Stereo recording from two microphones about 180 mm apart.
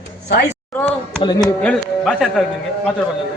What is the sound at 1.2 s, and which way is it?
Speech, 20° left (ahead or behind).